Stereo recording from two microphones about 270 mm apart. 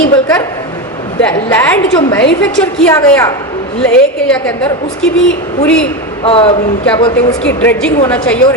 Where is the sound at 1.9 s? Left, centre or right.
Centre.